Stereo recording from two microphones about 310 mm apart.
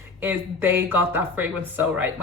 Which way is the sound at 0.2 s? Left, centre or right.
Centre.